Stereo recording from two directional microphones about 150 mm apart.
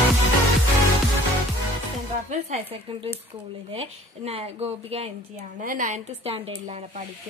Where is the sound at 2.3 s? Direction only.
40° right (ahead or behind).